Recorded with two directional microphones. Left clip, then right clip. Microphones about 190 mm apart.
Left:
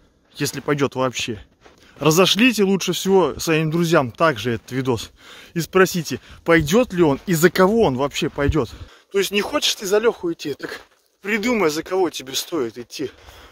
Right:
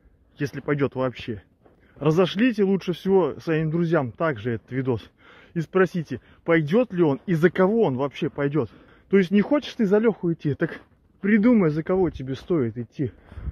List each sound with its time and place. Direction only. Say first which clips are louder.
0.4 s speech: left 4 dB; 30° left (ahead or behind)